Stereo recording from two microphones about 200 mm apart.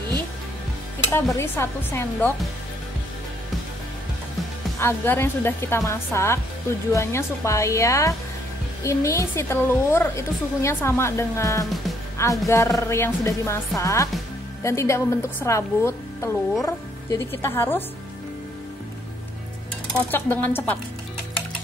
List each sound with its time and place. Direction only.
1.1 s a woman's voice: 15° left (ahead or behind)
4.7 s a woman's voice: 10° left (ahead or behind)
20.1 s a woman's voice: 10° left (ahead or behind)